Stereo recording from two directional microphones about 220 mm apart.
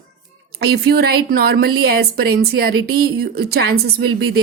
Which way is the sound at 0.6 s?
45° right (ahead or behind).